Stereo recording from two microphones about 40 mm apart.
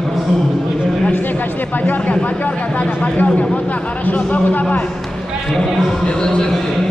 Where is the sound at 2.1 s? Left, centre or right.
Left.